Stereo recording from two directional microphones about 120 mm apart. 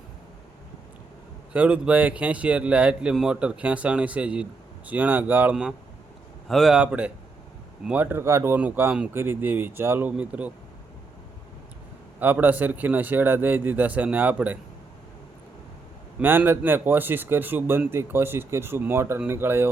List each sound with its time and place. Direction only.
1.5 s a man's voice: 10° right (ahead or behind)
6.5 s a man's voice: centre (ahead or behind)
6.7 s a man's voice: 10° right (ahead or behind)
12.2 s a man's voice: 15° right (ahead or behind)
16.2 s a man's voice: 15° right (ahead or behind)